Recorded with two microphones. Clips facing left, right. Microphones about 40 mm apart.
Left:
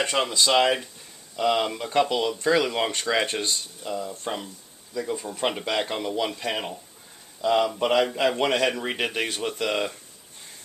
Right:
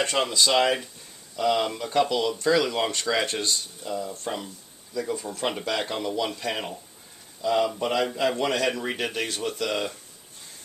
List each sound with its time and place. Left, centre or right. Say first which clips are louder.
0.0 s speech: even; centre
7.8 s a man's voice: left 3 dB; left
8.7 s speech: left 1 dB; left